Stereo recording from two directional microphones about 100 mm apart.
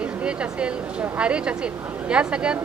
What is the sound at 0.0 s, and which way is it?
Speech, 10° right (ahead or behind).